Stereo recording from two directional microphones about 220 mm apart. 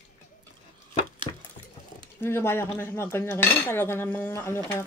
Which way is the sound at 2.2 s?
10° left (ahead or behind).